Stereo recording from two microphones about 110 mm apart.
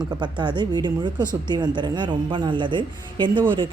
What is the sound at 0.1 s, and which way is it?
A woman's voice, 45° right (ahead or behind).